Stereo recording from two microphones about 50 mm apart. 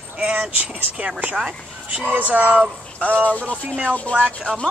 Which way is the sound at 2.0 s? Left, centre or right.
Right.